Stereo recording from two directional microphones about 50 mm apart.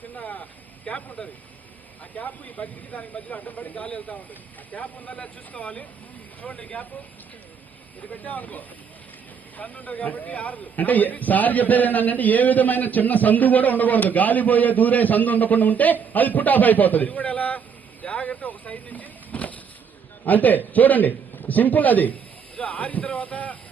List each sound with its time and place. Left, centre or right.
0.2 s vehicle: left
0.9 s a man's voice: left
8.1 s a man's voice: left